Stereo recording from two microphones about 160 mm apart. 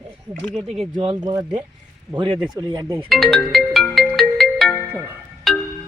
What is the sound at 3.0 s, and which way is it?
Ringtone, centre (ahead or behind).